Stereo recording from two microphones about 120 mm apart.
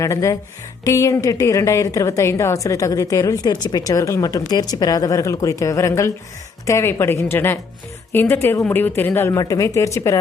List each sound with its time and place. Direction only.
0.0 s a woman's voice: 25° left (ahead or behind)